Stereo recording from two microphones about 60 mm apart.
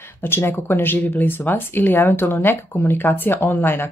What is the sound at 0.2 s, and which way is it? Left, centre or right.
Speech, left.